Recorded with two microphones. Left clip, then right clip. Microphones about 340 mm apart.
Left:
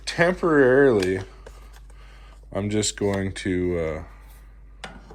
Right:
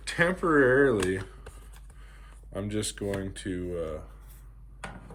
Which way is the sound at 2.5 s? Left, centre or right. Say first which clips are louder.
Left 8 dB; centre.